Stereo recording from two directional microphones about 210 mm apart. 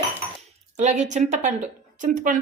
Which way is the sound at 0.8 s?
35° right (ahead or behind).